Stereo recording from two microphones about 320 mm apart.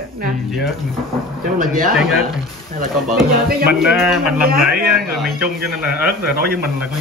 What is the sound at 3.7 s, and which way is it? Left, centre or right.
Speech, centre.